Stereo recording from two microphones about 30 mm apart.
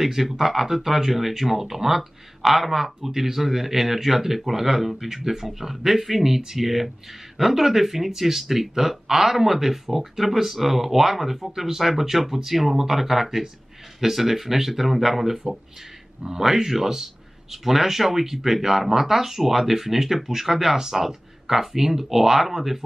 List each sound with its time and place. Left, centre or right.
0.0 s speech: centre
20.7 s speech: centre